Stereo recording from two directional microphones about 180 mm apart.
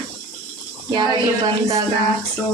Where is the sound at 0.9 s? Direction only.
25° right (ahead or behind).